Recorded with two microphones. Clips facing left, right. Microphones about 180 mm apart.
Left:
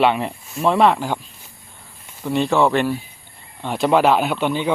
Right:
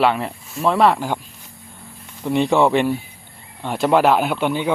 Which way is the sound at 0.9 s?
10° right (ahead or behind).